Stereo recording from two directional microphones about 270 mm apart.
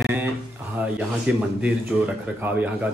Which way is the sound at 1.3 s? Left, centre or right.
Centre.